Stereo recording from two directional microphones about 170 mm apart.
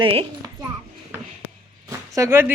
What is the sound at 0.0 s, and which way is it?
Speech, 30° right (ahead or behind).